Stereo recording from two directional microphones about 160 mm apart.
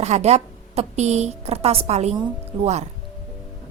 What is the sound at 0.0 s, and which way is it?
A woman's voice, 45° right (ahead or behind).